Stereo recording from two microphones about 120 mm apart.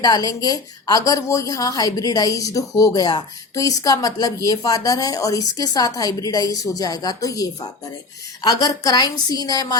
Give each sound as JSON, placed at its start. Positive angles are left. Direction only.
{"t": 0.0, "sound": "a woman's voice", "side_deg": 30}